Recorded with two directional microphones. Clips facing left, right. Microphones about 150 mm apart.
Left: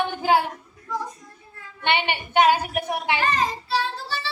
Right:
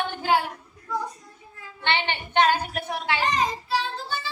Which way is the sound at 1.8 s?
15° left (ahead or behind).